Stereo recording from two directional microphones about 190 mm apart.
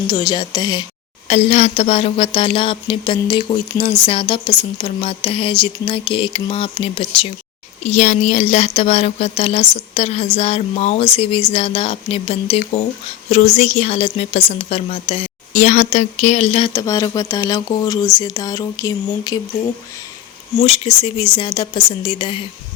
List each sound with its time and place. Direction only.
0.1 s speech: 20° left (ahead or behind)
1.3 s speech: 35° left (ahead or behind)
7.9 s speech: 35° left (ahead or behind)
16.7 s speech: 15° left (ahead or behind)
20.6 s speech: 30° left (ahead or behind)